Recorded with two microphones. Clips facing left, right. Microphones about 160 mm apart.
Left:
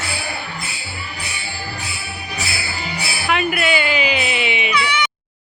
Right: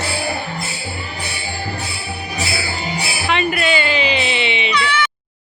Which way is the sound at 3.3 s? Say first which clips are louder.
Right 1 dB; 5° left (ahead or behind).